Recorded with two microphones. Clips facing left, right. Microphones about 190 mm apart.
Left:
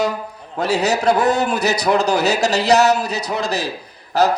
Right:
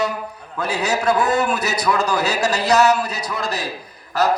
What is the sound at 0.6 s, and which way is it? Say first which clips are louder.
A man's voice: left 3 dB; 75° left (ahead or behind).